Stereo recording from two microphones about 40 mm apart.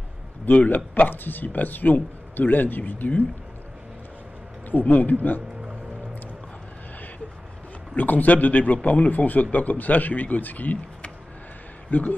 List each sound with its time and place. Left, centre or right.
0.5 s speech: left
4.6 s speech: left
7.9 s speech: left
11.9 s speech: left